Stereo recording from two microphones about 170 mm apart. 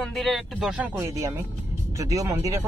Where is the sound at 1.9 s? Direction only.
20° right (ahead or behind).